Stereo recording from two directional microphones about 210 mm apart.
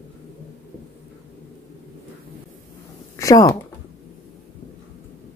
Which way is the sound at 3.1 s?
15° left (ahead or behind).